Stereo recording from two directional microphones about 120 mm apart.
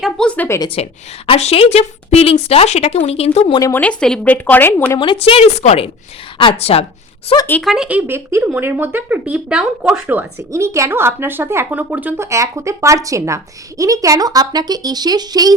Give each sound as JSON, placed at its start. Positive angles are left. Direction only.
{"t": 0.0, "sound": "speech", "side_deg": 5}
{"t": 0.8, "sound": "speech", "side_deg": 60}
{"t": 3.8, "sound": "speech", "side_deg": 10}
{"t": 5.1, "sound": "speech", "side_deg": 55}
{"t": 7.6, "sound": "speech", "side_deg": 0}
{"t": 7.9, "sound": "speech", "side_deg": -15}
{"t": 10.5, "sound": "speech", "side_deg": -25}